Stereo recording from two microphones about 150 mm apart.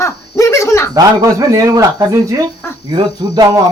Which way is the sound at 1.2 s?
20° right (ahead or behind).